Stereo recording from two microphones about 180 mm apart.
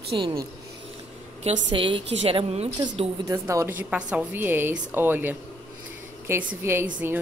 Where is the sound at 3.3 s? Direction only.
15° right (ahead or behind).